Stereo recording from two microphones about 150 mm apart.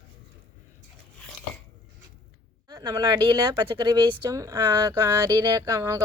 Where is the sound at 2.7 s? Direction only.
25° right (ahead or behind).